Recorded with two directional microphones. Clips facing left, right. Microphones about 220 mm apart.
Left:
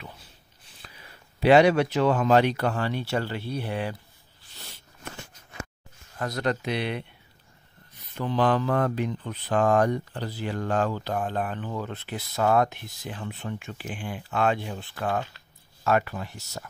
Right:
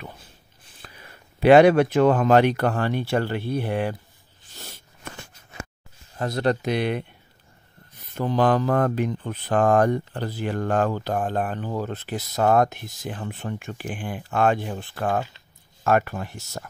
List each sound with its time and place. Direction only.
0.8 s speech: 55° right (ahead or behind)
6.1 s speech: 25° right (ahead or behind); by 7.1 s 45° right (ahead or behind)
8.1 s speech: 45° right (ahead or behind)